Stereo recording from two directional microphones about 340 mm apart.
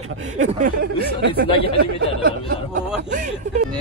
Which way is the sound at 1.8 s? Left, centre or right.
Right.